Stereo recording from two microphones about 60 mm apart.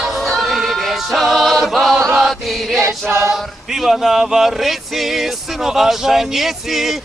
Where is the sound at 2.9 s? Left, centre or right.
Right.